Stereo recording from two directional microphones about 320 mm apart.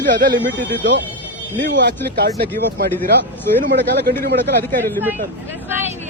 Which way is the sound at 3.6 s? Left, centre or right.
Right.